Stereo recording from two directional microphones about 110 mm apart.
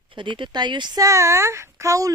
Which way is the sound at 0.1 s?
45° right (ahead or behind).